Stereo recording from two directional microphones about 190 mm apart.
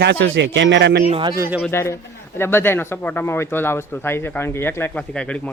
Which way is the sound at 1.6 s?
15° left (ahead or behind).